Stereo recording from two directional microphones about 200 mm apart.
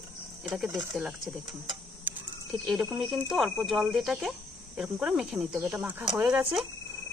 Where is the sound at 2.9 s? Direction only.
Centre (ahead or behind).